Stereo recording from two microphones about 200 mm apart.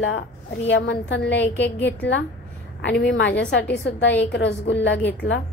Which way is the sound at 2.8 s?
65° left (ahead or behind).